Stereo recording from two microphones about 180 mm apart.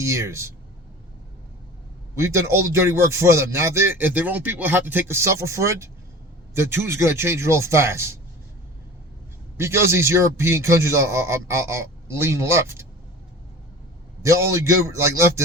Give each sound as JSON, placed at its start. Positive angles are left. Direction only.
{"t": 0.0, "sound": "speech", "side_deg": -15}
{"t": 2.1, "sound": "speech", "side_deg": -15}
{"t": 9.6, "sound": "speech", "side_deg": -15}
{"t": 14.2, "sound": "speech", "side_deg": -15}